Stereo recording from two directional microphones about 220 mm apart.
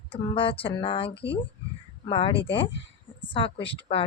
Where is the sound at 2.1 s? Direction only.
25° left (ahead or behind).